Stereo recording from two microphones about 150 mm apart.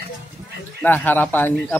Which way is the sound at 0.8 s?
10° left (ahead or behind).